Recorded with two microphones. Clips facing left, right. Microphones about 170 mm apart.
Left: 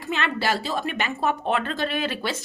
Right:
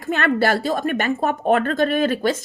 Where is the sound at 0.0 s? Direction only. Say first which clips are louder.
Right 7 dB; 50° right (ahead or behind).